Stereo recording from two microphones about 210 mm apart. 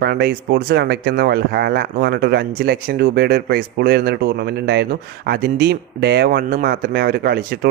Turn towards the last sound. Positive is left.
turn(degrees=-45)  # may be behind; listen again after turning